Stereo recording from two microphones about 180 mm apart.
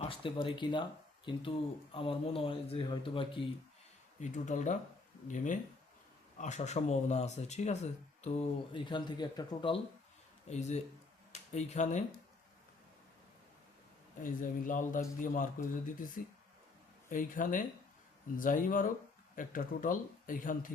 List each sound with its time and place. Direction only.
0.0 s speech: 30° left (ahead or behind)
4.2 s speech: 45° left (ahead or behind); by 9.8 s 25° left (ahead or behind)
10.5 s speech: 40° left (ahead or behind)
14.2 s speech: 50° left (ahead or behind)